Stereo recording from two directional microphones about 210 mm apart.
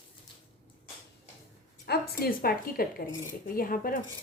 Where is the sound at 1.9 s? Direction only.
45° left (ahead or behind).